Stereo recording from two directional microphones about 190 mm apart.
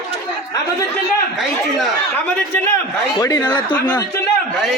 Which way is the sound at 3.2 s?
15° left (ahead or behind).